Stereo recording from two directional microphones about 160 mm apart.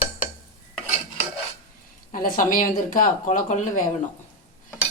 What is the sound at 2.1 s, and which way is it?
Speech, 60° left (ahead or behind).